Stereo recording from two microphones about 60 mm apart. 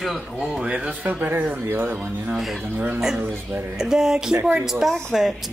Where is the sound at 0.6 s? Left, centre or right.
Centre.